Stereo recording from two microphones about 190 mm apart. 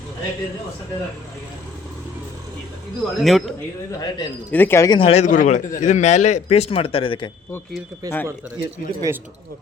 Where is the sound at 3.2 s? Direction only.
Centre (ahead or behind).